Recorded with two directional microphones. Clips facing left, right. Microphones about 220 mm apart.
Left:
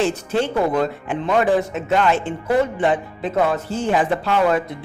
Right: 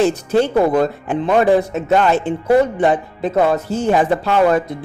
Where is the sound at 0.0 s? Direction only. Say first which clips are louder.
Right 5 dB; 40° right (ahead or behind).